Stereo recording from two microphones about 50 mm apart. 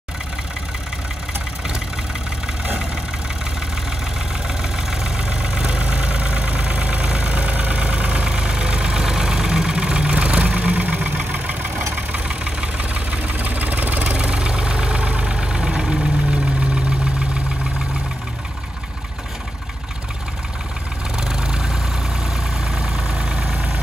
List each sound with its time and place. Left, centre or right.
4.6 s vehicle: centre; by 14.1 s right
14.1 s vehicle: centre
21.2 s vehicle: centre